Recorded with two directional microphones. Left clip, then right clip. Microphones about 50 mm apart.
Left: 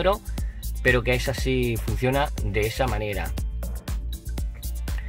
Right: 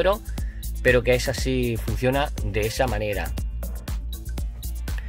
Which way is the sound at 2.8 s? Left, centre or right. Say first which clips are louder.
Right 2 dB; right.